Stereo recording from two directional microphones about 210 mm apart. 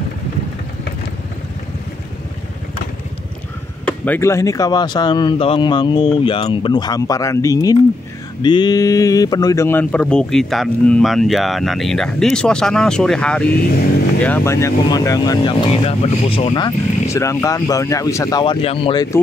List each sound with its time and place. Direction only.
3.8 s speech: 10° left (ahead or behind); by 19.0 s 25° left (ahead or behind)